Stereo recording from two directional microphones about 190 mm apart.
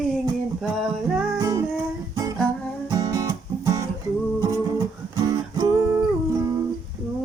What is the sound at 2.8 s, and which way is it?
Music, 15° right (ahead or behind).